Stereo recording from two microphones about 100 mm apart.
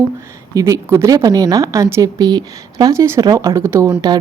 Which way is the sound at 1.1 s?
40° right (ahead or behind).